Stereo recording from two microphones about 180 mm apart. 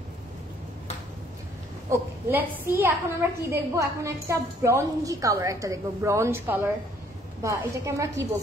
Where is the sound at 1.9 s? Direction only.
15° right (ahead or behind).